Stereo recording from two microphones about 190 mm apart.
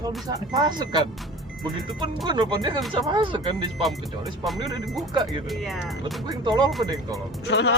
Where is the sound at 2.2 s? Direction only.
25° right (ahead or behind).